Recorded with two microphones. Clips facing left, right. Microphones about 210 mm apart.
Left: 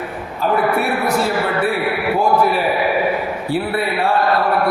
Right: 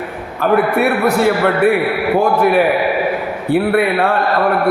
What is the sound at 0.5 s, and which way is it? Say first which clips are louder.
A man's voice: right 4 dB; 60° right (ahead or behind).